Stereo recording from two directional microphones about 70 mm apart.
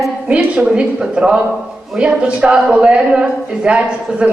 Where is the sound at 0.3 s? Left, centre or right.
Centre.